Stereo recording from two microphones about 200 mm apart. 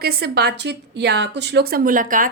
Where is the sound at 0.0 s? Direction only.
50° right (ahead or behind).